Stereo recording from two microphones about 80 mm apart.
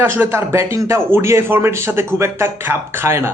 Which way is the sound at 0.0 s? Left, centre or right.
Right.